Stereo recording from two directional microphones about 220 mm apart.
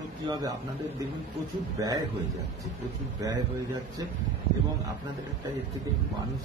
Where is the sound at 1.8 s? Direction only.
15° right (ahead or behind).